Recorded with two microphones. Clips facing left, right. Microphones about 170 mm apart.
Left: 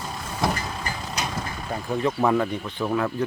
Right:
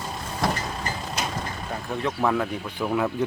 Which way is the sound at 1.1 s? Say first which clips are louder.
Even; centre (ahead or behind).